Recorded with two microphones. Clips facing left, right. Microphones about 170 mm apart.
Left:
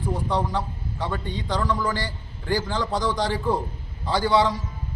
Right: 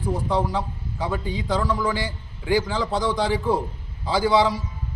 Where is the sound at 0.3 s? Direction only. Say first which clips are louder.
Right 2 dB; 5° right (ahead or behind).